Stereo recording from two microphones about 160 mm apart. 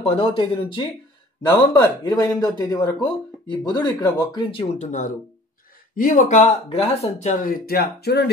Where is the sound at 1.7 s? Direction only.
25° left (ahead or behind).